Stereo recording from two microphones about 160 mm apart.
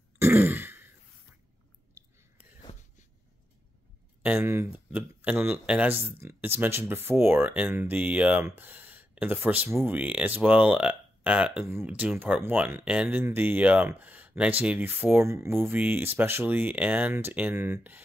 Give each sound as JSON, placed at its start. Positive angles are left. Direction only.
{"t": 0.2, "sound": "throat clearing", "side_deg": -10}
{"t": 4.2, "sound": "speech", "side_deg": -10}